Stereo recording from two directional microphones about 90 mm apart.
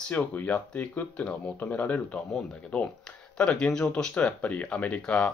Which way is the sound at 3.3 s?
10° left (ahead or behind).